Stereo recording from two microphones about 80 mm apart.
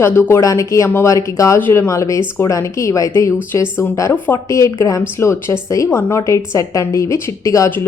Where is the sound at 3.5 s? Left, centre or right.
Left.